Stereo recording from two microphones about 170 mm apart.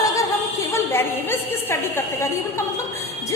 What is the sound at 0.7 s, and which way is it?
A woman's voice, 15° left (ahead or behind).